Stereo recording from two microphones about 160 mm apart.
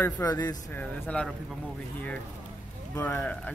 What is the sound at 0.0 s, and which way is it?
Speech, 20° left (ahead or behind).